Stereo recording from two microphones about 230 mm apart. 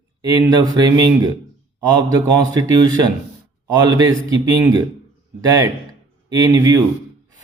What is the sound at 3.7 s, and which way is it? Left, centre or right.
Speech, centre.